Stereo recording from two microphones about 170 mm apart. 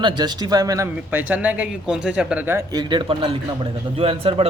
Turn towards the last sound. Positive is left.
turn(degrees=-35)  # may be behind; listen again after turning